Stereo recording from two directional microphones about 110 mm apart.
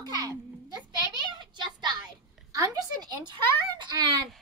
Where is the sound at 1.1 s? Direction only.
45° right (ahead or behind).